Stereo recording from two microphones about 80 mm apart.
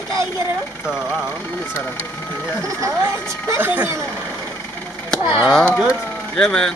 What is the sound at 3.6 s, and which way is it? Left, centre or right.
Speech, right.